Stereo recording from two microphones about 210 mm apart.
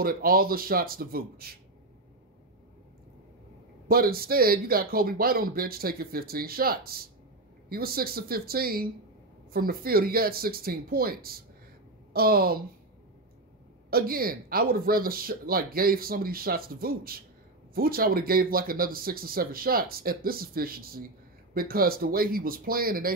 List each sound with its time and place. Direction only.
0.0 s speech: 45° right (ahead or behind)
3.9 s speech: 45° right (ahead or behind)
13.8 s speech: 45° right (ahead or behind)